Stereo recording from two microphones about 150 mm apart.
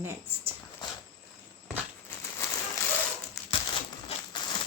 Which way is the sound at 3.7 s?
30° left (ahead or behind).